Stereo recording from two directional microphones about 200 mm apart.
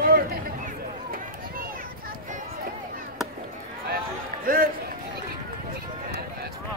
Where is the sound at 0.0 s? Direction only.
45° right (ahead or behind).